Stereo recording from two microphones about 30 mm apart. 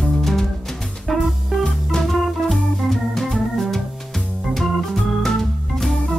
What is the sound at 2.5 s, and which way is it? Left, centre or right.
Organ, centre.